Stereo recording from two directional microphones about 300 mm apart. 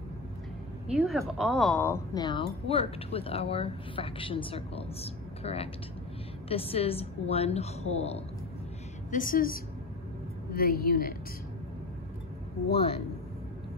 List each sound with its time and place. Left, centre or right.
0.8 s a woman's voice: centre; by 11.1 s left